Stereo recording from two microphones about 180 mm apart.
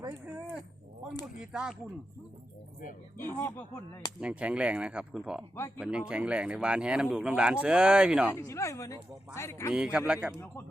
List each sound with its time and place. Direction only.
0.0 s speech: 10° right (ahead or behind)
3.2 s a man's voice: 15° left (ahead or behind)
4.2 s speech: 5° right (ahead or behind)
5.5 s a man's voice: 15° left (ahead or behind)
5.8 s speech: 5° right (ahead or behind)
8.4 s a man's voice: 15° left (ahead or behind)
9.7 s speech: 5° right (ahead or behind)